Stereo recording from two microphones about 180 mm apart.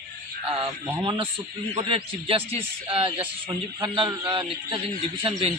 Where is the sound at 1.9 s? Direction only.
30° right (ahead or behind).